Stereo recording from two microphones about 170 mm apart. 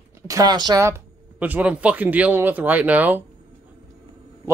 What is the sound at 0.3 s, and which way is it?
Speech, 25° right (ahead or behind).